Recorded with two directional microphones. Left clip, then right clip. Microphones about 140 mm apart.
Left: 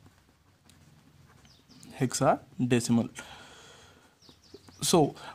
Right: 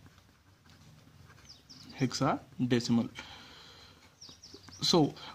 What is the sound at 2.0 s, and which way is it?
Speech, 55° left (ahead or behind).